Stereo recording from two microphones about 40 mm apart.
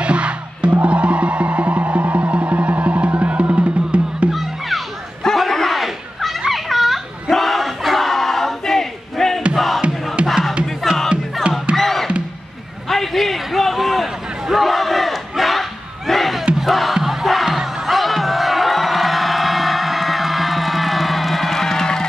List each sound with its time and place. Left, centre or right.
0.0 s music: right
4.3 s music: centre
5.2 s a sound: centre
6.5 s battle cry: centre
10.2 s music: centre
12.8 s a sound: centre
14.0 s battle cry: centre
16.1 s a sound: centre
16.5 s music: centre
17.9 s music: centre